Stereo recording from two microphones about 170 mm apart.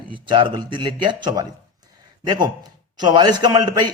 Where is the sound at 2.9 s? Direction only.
25° right (ahead or behind).